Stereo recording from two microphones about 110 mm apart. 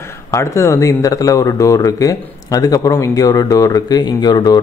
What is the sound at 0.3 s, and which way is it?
Speech, 25° left (ahead or behind).